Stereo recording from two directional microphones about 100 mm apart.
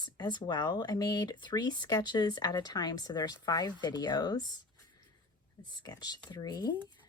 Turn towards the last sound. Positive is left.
turn(degrees=45)  # may be behind; listen again after turning